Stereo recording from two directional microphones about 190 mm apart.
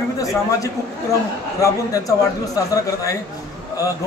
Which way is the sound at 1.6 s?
20° left (ahead or behind).